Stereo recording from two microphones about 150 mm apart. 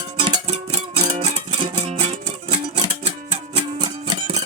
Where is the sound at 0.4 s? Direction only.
45° right (ahead or behind).